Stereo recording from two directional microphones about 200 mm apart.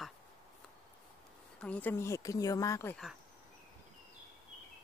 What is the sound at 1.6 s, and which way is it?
Speech, 5° left (ahead or behind).